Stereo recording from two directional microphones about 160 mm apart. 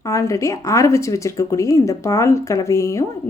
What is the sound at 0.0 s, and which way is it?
A woman's voice, 20° left (ahead or behind).